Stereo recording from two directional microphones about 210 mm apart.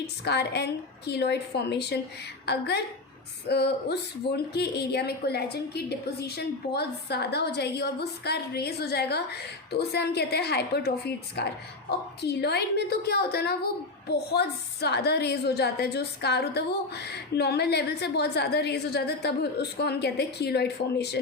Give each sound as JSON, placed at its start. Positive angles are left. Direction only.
{"t": 0.0, "sound": "speech", "side_deg": 50}